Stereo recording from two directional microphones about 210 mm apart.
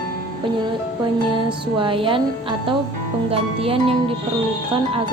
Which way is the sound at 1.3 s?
25° right (ahead or behind).